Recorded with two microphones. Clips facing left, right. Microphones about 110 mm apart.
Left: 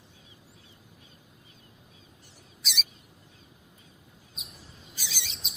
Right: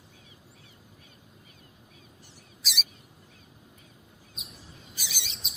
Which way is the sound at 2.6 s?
Centre (ahead or behind).